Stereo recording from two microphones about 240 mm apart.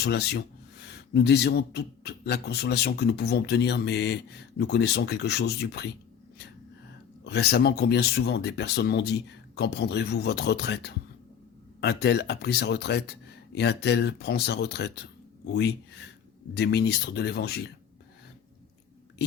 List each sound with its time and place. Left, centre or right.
0.0 s speech: left
7.3 s speech: left